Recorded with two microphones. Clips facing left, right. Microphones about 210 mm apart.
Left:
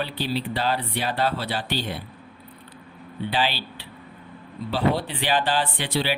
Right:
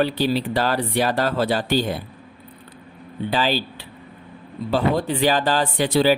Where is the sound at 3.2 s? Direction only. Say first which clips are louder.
Right 4 dB; 45° right (ahead or behind).